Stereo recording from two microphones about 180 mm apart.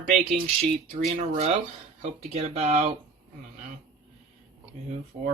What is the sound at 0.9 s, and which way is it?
Speech, 45° right (ahead or behind).